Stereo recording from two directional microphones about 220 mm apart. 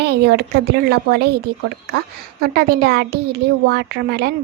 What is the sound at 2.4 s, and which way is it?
Speech, 45° right (ahead or behind).